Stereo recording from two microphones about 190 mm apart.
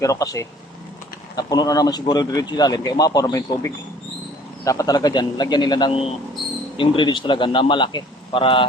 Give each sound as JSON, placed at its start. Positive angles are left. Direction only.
{"t": 0.0, "sound": "speech", "side_deg": 20}